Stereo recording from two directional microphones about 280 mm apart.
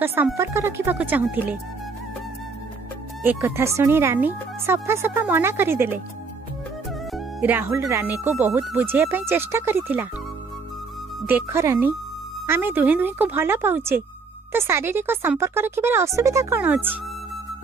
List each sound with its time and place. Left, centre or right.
0.0 s speech: centre
3.3 s speech: centre
7.1 s speech: centre
11.2 s speech: centre